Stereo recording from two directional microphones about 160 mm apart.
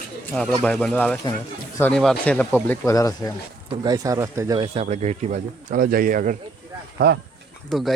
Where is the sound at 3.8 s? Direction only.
25° right (ahead or behind).